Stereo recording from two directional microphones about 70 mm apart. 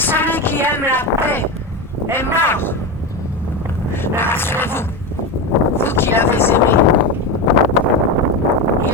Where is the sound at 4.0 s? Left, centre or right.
Left.